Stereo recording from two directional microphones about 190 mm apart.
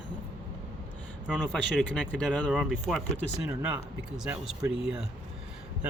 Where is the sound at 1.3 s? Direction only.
5° left (ahead or behind).